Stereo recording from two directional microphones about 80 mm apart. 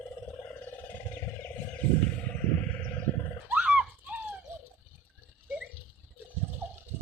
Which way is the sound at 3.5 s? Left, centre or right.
Right.